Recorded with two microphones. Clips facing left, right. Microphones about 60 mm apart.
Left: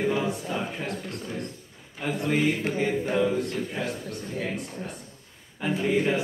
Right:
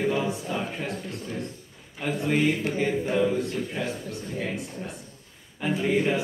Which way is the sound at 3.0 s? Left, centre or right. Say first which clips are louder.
Even; centre.